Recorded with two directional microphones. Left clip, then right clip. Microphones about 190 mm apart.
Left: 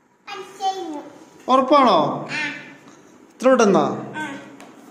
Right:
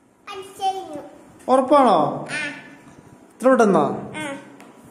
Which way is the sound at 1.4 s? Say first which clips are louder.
Even; 30° right (ahead or behind).